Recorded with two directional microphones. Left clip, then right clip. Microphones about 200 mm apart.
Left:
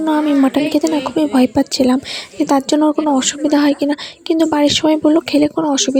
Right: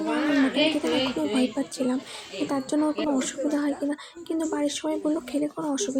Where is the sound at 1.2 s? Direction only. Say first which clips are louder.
Left 12 dB; 45° left (ahead or behind).